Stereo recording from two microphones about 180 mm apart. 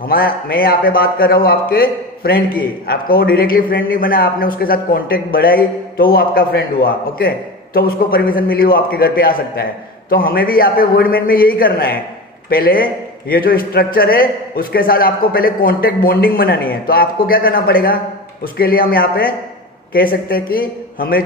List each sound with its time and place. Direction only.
0.1 s a man's voice: 55° left (ahead or behind)